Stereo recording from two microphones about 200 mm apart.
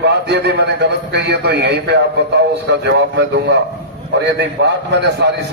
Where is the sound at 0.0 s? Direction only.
60° right (ahead or behind).